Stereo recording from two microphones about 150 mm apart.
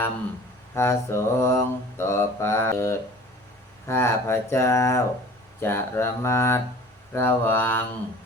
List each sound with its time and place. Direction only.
0.7 s mantra: 15° left (ahead or behind)